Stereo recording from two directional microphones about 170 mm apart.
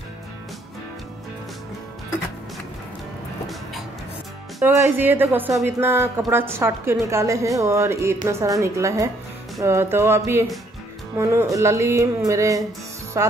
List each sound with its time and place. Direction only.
4.6 s a woman's voice: 15° right (ahead or behind)